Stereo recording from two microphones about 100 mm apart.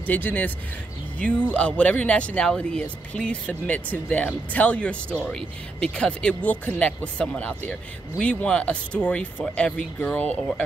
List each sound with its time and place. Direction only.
0.0 s speech: 15° left (ahead or behind)
1.5 s speech: 10° left (ahead or behind)